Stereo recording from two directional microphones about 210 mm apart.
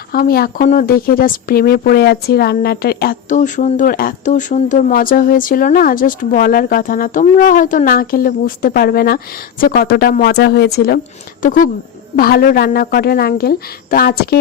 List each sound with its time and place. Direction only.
0.1 s speech: 45° left (ahead or behind)